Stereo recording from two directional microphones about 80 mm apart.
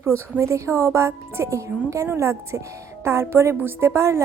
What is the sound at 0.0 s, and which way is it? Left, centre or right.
Speech, right.